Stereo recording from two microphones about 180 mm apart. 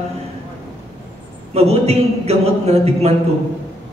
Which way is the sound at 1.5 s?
35° right (ahead or behind).